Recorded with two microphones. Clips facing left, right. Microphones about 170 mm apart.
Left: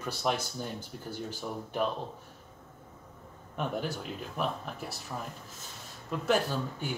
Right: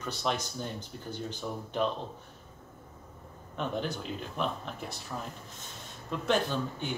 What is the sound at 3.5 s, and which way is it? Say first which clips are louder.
Speech: even; 10° left (ahead or behind).